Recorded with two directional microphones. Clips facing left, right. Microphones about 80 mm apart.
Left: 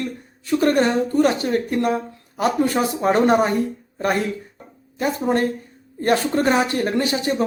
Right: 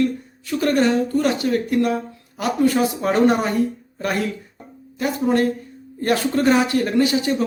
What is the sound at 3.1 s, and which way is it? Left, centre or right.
Speech, left.